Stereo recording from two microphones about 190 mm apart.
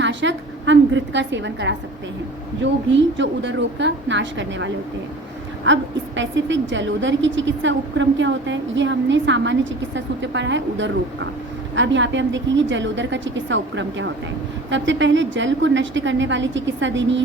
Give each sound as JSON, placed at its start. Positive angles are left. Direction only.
{"t": 0.0, "sound": "a woman's voice", "side_deg": -70}
{"t": 2.9, "sound": "a woman's voice", "side_deg": -70}